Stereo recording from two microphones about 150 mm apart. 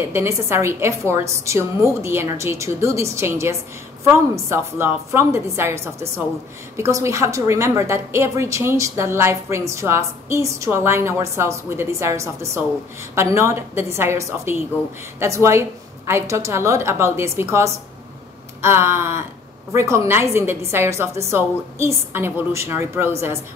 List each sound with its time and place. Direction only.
0.1 s a woman's voice: 15° right (ahead or behind)